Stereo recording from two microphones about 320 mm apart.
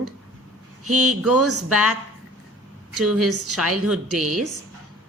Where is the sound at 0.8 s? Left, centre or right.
Right.